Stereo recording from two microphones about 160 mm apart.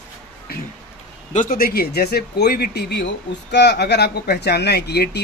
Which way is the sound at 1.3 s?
55° left (ahead or behind).